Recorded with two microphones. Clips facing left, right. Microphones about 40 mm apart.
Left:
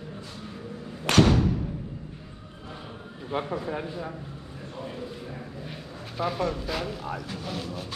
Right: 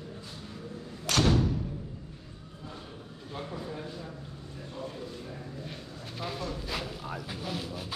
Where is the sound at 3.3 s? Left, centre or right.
Left.